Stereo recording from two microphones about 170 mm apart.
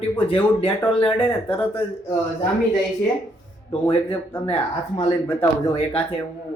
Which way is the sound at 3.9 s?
35° left (ahead or behind).